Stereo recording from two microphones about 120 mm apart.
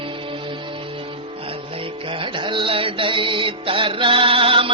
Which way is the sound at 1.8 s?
45° right (ahead or behind).